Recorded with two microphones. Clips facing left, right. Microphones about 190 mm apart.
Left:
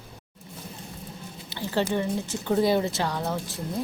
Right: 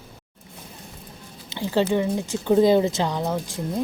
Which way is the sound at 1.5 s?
15° right (ahead or behind).